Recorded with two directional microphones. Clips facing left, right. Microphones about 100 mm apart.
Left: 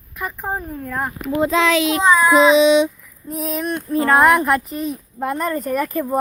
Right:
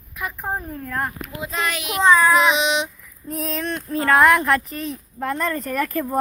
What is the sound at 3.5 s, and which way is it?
Speech, 15° left (ahead or behind).